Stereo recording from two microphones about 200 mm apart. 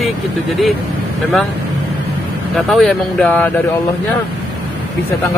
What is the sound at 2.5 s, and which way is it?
Speech, 5° left (ahead or behind).